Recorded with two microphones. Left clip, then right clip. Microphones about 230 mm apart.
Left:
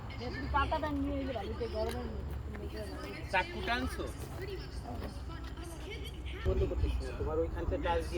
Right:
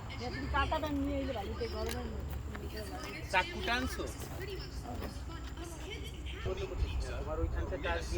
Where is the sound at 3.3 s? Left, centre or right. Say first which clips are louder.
Right 1 dB; right.